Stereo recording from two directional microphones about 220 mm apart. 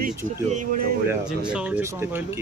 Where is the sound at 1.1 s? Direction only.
5° right (ahead or behind).